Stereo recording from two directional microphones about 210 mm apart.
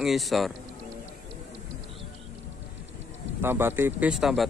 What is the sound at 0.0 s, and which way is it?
Speech, centre (ahead or behind).